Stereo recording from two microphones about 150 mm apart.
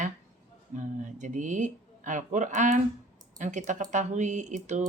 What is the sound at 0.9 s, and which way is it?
Speech, 55° right (ahead or behind).